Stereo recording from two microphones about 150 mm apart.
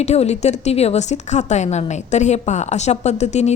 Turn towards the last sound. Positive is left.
turn(degrees=50)  # may be behind; listen again after turning